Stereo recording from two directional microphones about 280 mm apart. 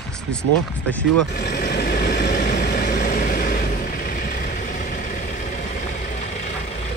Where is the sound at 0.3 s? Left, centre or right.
Centre.